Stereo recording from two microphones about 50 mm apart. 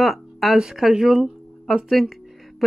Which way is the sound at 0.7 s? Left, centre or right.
Centre.